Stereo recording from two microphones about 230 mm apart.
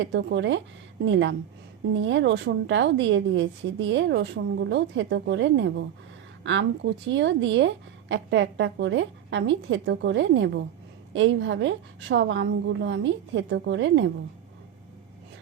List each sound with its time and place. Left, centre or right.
0.0 s a woman's voice: right